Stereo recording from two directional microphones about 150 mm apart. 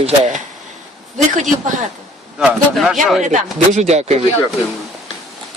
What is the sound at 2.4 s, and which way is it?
Speech, centre (ahead or behind).